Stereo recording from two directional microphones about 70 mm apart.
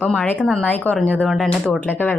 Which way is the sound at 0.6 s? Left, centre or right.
Left.